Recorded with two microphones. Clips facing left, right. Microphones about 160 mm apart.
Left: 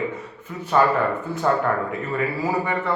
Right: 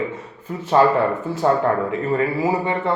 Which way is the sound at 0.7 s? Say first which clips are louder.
Right 3 dB; 30° right (ahead or behind).